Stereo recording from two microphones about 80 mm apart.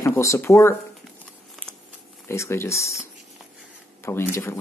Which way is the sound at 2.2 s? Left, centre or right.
Left.